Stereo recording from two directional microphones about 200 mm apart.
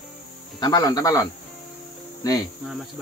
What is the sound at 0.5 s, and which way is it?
Speech, 20° left (ahead or behind).